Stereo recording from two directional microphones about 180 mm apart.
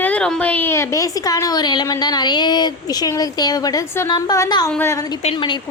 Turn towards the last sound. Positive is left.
turn(degrees=30)  # may be behind; listen again after turning